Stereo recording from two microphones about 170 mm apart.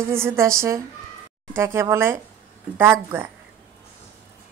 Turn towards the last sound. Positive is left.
turn(degrees=-10)  # may be behind; listen again after turning